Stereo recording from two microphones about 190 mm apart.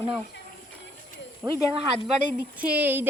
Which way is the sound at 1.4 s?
10° right (ahead or behind).